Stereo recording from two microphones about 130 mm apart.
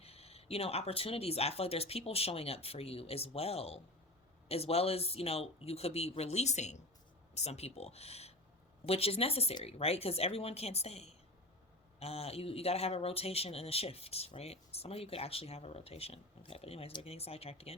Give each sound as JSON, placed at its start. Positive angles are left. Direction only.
{"t": 0.0, "sound": "speech", "side_deg": 50}